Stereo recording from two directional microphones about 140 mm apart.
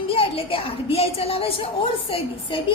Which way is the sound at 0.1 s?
40° left (ahead or behind).